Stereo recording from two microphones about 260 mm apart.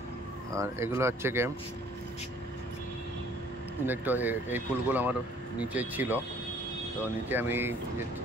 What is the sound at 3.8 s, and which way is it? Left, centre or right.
Speech, centre.